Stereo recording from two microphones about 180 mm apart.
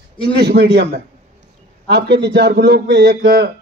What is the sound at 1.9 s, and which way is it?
A man's voice, 65° right (ahead or behind).